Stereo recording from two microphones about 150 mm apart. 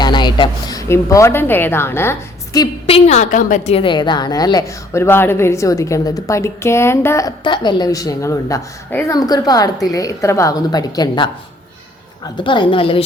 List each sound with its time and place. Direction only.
0.0 s speech: 30° left (ahead or behind)
2.8 s a woman's voice: 45° left (ahead or behind)
3.8 s a woman's voice: 30° left (ahead or behind)